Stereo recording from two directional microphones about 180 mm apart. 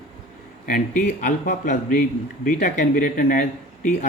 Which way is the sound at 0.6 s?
40° left (ahead or behind).